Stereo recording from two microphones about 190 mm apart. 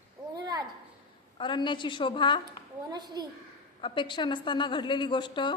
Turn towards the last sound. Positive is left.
turn(degrees=25)  # may be behind; listen again after turning